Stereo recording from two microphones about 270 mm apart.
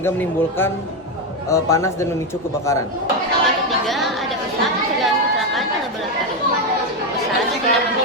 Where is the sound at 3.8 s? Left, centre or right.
Centre.